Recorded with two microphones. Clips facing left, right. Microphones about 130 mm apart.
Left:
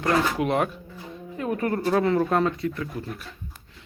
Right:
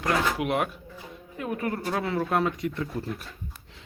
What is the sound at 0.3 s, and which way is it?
Speech, 5° right (ahead or behind).